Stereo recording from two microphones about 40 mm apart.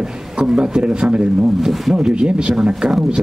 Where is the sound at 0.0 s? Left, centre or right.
Right.